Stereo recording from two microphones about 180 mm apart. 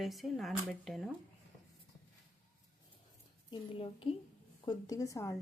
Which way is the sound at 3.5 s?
30° left (ahead or behind).